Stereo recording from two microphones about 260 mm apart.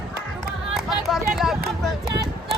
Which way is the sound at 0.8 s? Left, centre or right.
Centre.